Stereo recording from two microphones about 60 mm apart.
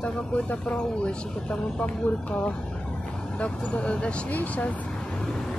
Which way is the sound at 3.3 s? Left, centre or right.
Centre.